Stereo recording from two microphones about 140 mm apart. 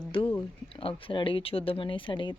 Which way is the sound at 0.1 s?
40° left (ahead or behind).